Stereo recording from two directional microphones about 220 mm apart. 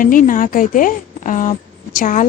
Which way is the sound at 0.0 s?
40° left (ahead or behind).